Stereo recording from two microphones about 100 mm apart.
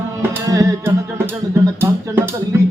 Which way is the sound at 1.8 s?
20° right (ahead or behind).